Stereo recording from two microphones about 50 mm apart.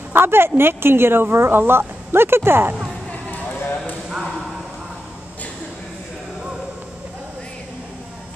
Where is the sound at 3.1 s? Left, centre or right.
Left.